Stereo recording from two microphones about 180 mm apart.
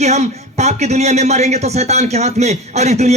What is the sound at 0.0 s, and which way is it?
A man's voice, 40° right (ahead or behind).